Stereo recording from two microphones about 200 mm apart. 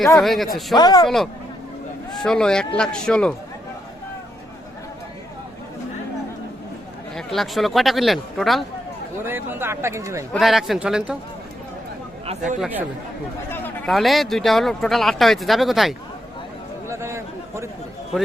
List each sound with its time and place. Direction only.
0.2 s speech: centre (ahead or behind)
0.8 s speech: 20° left (ahead or behind)
1.0 s speech: centre (ahead or behind)
7.2 s speech: centre (ahead or behind)
9.2 s speech: 10° right (ahead or behind)
10.3 s speech: centre (ahead or behind)
12.2 s speech: 35° right (ahead or behind)
12.5 s speech: 5° right (ahead or behind)
13.5 s chatter: 10° left (ahead or behind)
13.9 s speech: centre (ahead or behind)
16.9 s a sound: 15° right (ahead or behind)